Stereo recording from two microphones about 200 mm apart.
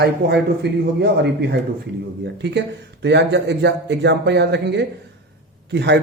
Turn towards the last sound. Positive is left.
turn(degrees=-60)  # may be behind; listen again after turning